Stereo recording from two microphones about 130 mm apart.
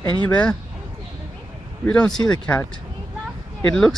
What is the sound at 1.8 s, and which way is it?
Speech, 5° left (ahead or behind).